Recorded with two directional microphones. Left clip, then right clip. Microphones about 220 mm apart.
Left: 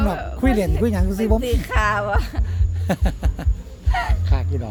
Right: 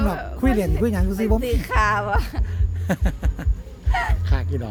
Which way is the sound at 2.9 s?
5° left (ahead or behind).